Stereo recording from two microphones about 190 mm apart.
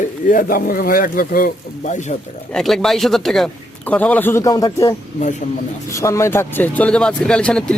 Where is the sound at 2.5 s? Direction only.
Centre (ahead or behind); by 4.9 s 20° left (ahead or behind).